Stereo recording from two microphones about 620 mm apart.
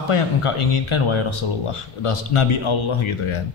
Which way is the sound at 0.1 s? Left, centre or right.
Left.